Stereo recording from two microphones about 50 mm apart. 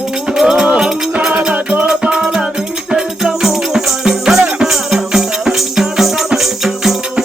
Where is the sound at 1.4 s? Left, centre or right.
Right.